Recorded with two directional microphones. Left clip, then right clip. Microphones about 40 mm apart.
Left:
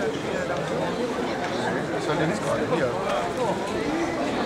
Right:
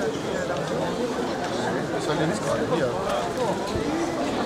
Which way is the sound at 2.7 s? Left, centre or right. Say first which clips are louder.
Even; right.